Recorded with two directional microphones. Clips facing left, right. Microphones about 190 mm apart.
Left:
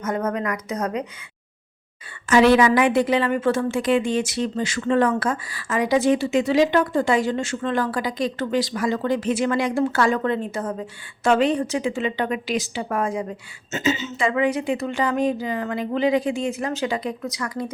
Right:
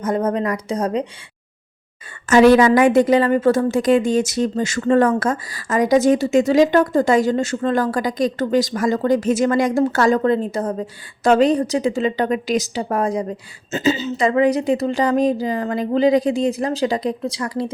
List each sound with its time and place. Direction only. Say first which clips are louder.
0.0 s a woman's voice: right 5 dB; 30° right (ahead or behind)
2.3 s a woman's voice: right 4 dB; 45° right (ahead or behind)